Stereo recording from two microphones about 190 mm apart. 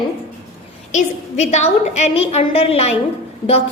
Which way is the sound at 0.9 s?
35° left (ahead or behind).